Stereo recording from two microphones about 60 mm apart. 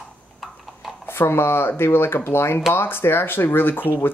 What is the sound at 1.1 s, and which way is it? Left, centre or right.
Speech, left.